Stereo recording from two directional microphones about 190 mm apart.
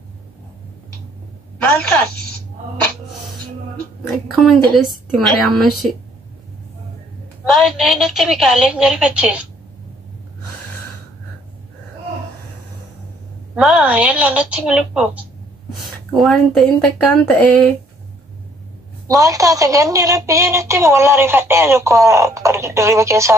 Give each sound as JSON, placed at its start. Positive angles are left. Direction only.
{"t": 1.6, "sound": "a woman's voice", "side_deg": 5}
{"t": 4.4, "sound": "a woman's voice", "side_deg": 0}
{"t": 7.4, "sound": "a woman's voice", "side_deg": 0}
{"t": 13.6, "sound": "a woman's voice", "side_deg": -5}
{"t": 19.0, "sound": "a woman's voice", "side_deg": -20}